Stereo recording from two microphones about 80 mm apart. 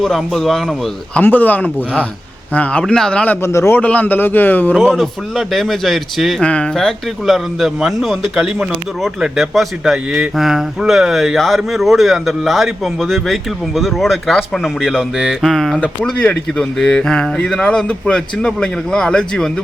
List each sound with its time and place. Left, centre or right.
0.0 s speech: centre
1.2 s a man's voice: left
3.4 s a man's voice: left
3.8 s a man's voice: centre
4.9 s speech: centre
6.4 s a man's voice: centre
6.7 s speech: centre
16.1 s a man's voice: centre